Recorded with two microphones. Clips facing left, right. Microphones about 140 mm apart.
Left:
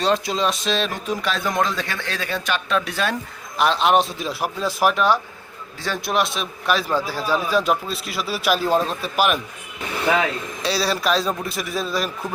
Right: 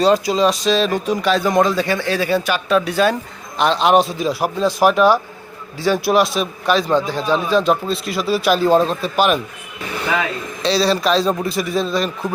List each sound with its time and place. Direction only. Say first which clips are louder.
0.0 s speech: right 6 dB; centre (ahead or behind)
8.7 s speech: right 6 dB; 35° right (ahead or behind)
9.1 s speech: right 3 dB; 5° left (ahead or behind)
10.6 s speech: right 6 dB; 5° left (ahead or behind)